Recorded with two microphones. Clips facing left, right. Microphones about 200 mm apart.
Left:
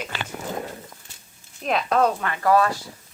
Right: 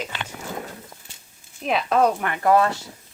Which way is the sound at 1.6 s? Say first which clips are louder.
Right 1 dB; 5° right (ahead or behind).